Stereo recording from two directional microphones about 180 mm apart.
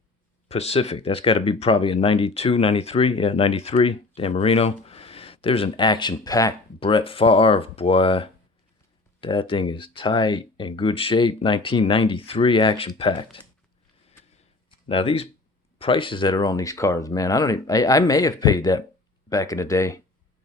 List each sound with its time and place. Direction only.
0.4 s speech: 35° left (ahead or behind)
14.8 s speech: 30° left (ahead or behind)